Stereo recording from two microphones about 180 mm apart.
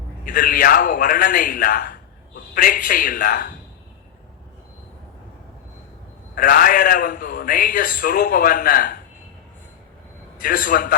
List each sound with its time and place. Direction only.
0.3 s a man's voice: 50° left (ahead or behind)
6.3 s a man's voice: 50° left (ahead or behind)
10.4 s a man's voice: 50° left (ahead or behind)